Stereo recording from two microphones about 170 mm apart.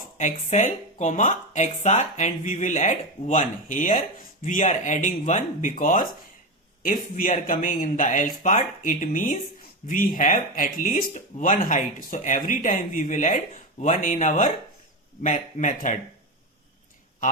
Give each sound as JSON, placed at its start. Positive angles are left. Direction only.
{"t": 0.2, "sound": "speech", "side_deg": 45}